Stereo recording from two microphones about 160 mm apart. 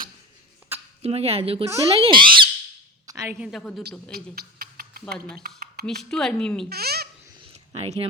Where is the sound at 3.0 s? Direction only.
20° right (ahead or behind).